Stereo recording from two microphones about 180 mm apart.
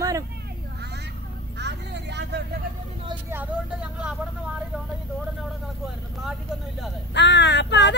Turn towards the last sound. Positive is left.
turn(degrees=75)  # may be behind; listen again after turning